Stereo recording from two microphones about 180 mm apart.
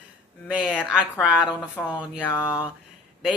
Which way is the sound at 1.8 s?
15° left (ahead or behind).